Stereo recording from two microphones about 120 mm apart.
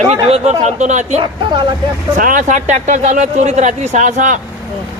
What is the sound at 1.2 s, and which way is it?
Speech, 40° right (ahead or behind).